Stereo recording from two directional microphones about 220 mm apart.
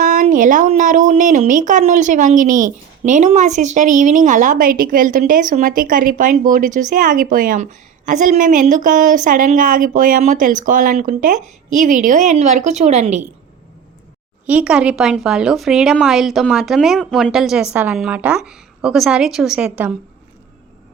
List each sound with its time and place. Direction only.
0.0 s speech: 35° right (ahead or behind)
14.4 s speech: 5° right (ahead or behind)